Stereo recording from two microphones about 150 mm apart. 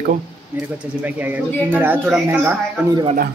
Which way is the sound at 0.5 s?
10° right (ahead or behind).